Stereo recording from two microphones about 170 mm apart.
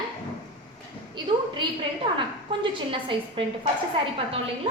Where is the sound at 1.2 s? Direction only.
25° right (ahead or behind).